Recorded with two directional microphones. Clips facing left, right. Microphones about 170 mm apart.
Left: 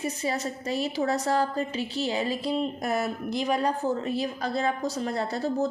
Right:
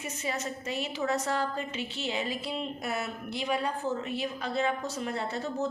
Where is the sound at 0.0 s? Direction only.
35° left (ahead or behind).